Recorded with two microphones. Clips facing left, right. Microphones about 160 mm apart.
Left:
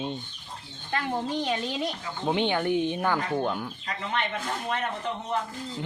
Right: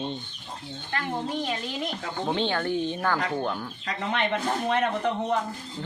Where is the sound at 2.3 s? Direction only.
15° left (ahead or behind).